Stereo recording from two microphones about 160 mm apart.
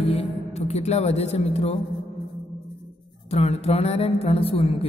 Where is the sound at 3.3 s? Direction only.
40° left (ahead or behind).